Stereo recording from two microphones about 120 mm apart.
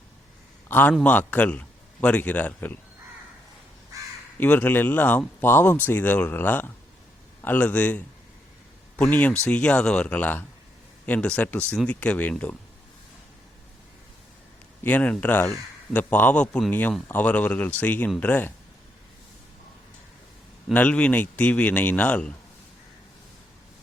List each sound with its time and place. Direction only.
0.7 s speech: 15° left (ahead or behind)
4.4 s speech: 15° left (ahead or behind)
14.8 s speech: 15° left (ahead or behind)
20.7 s speech: 10° left (ahead or behind)